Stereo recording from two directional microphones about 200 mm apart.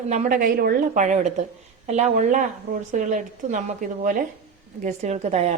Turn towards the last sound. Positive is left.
turn(degrees=-35)  # may be behind; listen again after turning